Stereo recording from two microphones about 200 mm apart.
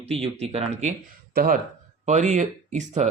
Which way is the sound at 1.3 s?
50° right (ahead or behind).